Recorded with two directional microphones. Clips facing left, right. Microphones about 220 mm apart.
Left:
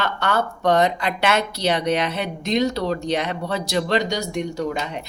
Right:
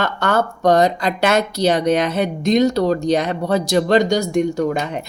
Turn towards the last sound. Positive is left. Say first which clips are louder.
# right 7 dB
turn(degrees=-50)  # may be behind; listen again after turning